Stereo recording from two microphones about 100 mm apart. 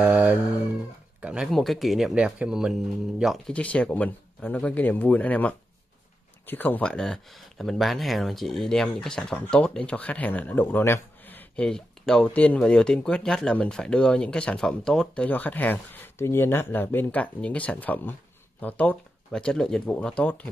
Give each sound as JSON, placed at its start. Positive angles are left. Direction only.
{"t": 0.0, "sound": "cat", "side_deg": -15}
{"t": 1.2, "sound": "a sound", "side_deg": -10}
{"t": 1.5, "sound": "speech", "side_deg": 0}
{"t": 3.5, "sound": "speech", "side_deg": 15}
{"t": 6.9, "sound": "speech", "side_deg": 5}